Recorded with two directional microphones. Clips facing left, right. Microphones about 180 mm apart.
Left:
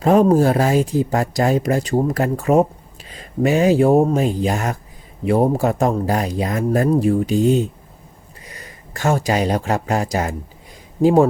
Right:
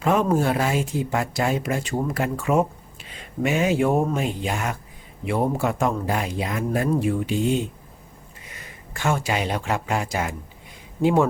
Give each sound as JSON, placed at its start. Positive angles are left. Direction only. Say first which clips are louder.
{"t": 0.0, "sound": "speech", "louder": "left 7 dB", "side_deg": 35}